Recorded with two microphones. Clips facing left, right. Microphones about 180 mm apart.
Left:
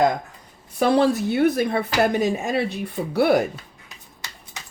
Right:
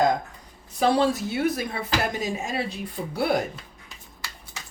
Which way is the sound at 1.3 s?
60° left (ahead or behind).